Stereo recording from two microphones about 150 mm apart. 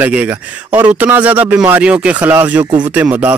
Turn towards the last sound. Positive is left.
turn(degrees=-10)  # may be behind; listen again after turning